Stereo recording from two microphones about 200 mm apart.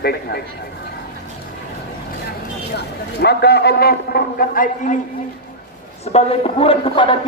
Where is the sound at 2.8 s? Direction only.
55° left (ahead or behind).